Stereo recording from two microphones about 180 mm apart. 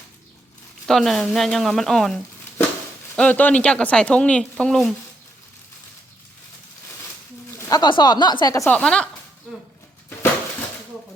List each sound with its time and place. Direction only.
0.9 s speech: centre (ahead or behind)
7.7 s speech: 25° left (ahead or behind)
8.7 s speech: 5° left (ahead or behind)